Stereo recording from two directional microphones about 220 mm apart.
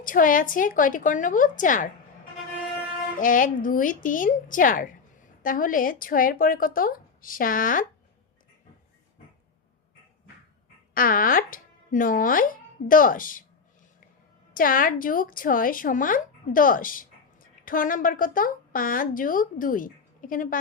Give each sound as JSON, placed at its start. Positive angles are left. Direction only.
{"t": 0.0, "sound": "a woman's voice", "side_deg": 40}
{"t": 3.2, "sound": "a woman's voice", "side_deg": 40}
{"t": 10.9, "sound": "a woman's voice", "side_deg": 40}
{"t": 14.5, "sound": "a woman's voice", "side_deg": 40}